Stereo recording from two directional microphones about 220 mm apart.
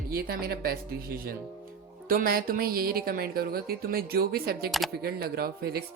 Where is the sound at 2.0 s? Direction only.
40° right (ahead or behind).